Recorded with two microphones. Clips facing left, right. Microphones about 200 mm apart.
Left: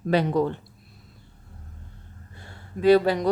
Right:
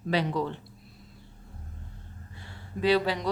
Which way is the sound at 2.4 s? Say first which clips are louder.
Left 7 dB; 50° left (ahead or behind).